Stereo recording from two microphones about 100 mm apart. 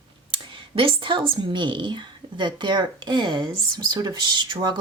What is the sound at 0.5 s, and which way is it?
A woman's voice, 60° right (ahead or behind).